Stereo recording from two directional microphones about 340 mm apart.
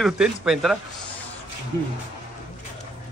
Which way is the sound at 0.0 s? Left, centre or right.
Centre.